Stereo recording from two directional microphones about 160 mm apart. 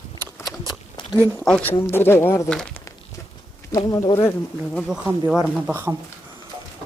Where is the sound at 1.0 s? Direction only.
30° left (ahead or behind).